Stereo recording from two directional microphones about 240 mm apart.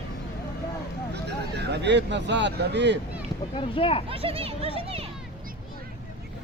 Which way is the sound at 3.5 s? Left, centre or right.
Left.